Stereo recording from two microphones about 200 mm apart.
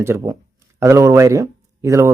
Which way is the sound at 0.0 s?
15° right (ahead or behind).